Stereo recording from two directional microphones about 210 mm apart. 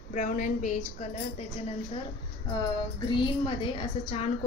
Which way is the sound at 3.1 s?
20° left (ahead or behind).